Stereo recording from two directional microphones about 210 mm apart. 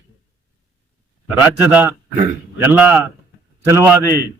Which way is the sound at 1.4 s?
10° right (ahead or behind).